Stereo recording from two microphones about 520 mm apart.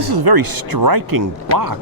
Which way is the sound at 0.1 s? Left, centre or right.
Right.